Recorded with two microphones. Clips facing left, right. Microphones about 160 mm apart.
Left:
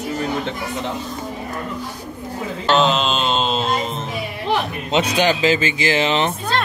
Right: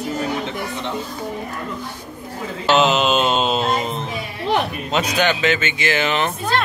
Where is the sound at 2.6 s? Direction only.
5° right (ahead or behind).